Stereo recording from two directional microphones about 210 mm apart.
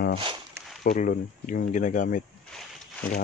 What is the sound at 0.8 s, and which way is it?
Speech, 40° left (ahead or behind).